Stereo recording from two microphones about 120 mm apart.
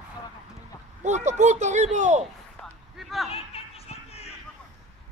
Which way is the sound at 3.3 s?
55° left (ahead or behind).